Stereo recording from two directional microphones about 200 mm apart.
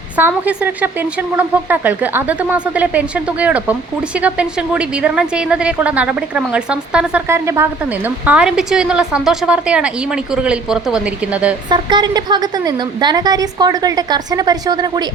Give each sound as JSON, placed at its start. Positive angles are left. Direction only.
{"t": 0.2, "sound": "speech", "side_deg": -10}
{"t": 11.7, "sound": "a woman's voice", "side_deg": -20}